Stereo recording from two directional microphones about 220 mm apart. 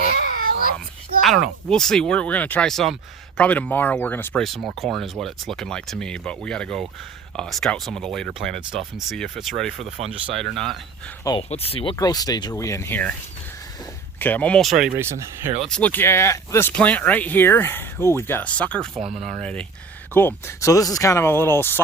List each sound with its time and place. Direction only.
1.2 s speech: centre (ahead or behind)
10.0 s speech: 30° right (ahead or behind)
10.3 s speech: centre (ahead or behind)
11.2 s speech: 15° left (ahead or behind)
11.4 s speech: 25° left (ahead or behind); by 13.1 s 10° left (ahead or behind)
14.2 s speech: 5° left (ahead or behind)
15.4 s speech: 30° right (ahead or behind)
15.7 s speech: 5° left (ahead or behind)
19.0 s speech: 30° right (ahead or behind)
20.1 s speech: 10° left (ahead or behind)